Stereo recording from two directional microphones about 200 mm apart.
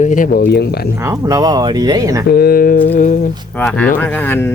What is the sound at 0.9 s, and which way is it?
Speech, 15° right (ahead or behind).